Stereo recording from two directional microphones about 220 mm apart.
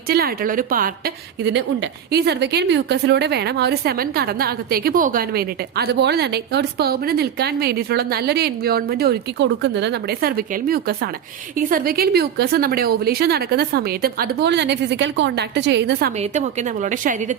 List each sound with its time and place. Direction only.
0.1 s a woman's voice: 45° right (ahead or behind)
16.1 s a woman's voice: 30° right (ahead or behind)